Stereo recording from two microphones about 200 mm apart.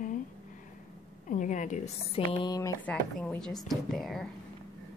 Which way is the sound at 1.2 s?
40° left (ahead or behind).